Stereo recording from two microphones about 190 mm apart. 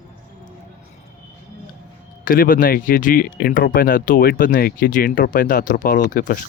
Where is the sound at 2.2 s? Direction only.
45° left (ahead or behind).